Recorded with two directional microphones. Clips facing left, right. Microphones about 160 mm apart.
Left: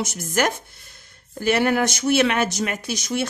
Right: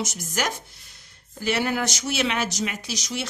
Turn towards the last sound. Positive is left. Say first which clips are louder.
# left 6 dB
turn(degrees=55)  # may be behind; listen again after turning